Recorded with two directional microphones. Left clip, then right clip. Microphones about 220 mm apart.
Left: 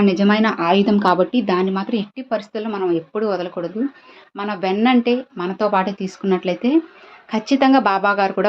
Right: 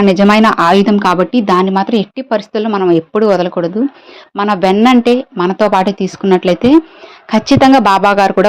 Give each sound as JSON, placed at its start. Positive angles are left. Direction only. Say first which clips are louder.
{"t": 0.0, "sound": "speech", "louder": "right 8 dB", "side_deg": -45}